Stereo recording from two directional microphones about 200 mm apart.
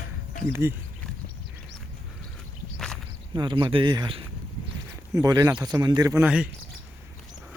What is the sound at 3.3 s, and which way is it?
Speech, 25° right (ahead or behind).